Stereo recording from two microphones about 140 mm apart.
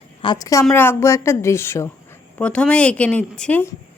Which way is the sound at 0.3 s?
25° left (ahead or behind).